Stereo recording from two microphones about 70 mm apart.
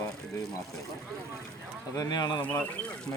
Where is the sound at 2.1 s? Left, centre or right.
Left.